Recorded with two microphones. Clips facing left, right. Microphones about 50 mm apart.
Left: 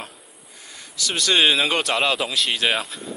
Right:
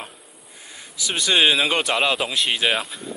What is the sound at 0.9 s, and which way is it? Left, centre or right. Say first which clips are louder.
Speech: even; centre.